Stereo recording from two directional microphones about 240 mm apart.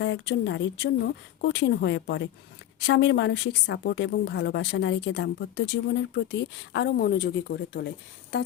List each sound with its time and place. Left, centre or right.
0.0 s a woman's voice: left